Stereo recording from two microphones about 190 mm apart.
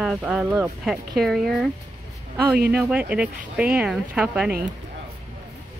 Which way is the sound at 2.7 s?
5° right (ahead or behind).